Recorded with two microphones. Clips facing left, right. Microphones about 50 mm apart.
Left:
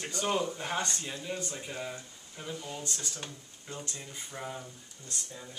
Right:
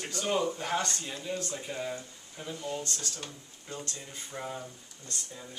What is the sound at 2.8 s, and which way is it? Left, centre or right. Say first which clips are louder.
Speech: right 1 dB; centre.